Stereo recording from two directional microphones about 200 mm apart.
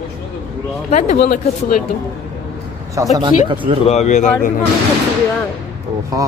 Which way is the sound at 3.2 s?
25° right (ahead or behind).